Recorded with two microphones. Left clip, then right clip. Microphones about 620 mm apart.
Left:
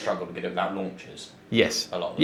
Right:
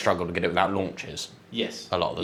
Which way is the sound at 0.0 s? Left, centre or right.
Right.